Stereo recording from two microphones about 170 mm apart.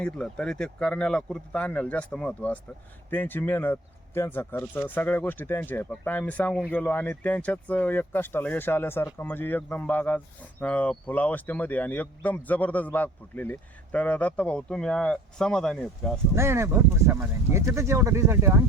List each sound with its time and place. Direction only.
0.0 s speech: 5° left (ahead or behind)
16.3 s speech: 15° right (ahead or behind)